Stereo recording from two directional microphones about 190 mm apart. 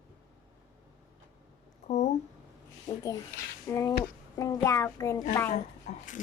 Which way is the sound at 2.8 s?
20° left (ahead or behind).